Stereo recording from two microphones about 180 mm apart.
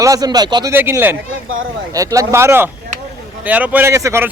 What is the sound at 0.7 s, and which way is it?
Speech, 10° right (ahead or behind).